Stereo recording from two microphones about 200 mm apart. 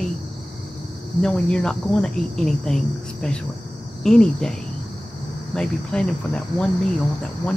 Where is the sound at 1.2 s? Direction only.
5° left (ahead or behind).